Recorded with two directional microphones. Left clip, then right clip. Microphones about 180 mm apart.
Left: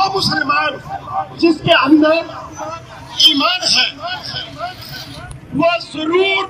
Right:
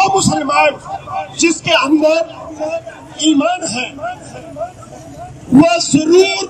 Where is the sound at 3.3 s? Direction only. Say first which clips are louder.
Left 2 dB; 55° right (ahead or behind).